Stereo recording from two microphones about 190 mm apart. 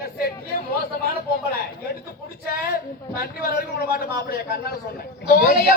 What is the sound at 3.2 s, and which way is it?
A man's voice, 50° left (ahead or behind).